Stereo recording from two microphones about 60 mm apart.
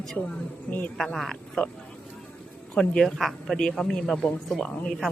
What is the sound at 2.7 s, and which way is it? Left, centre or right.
A man's voice, centre.